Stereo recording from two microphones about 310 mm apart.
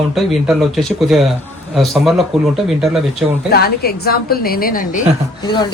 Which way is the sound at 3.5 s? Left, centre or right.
Left.